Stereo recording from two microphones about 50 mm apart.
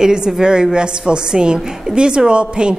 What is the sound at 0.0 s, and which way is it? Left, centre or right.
A woman's voice, centre.